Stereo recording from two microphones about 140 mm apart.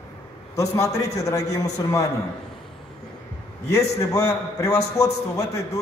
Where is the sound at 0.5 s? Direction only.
25° left (ahead or behind).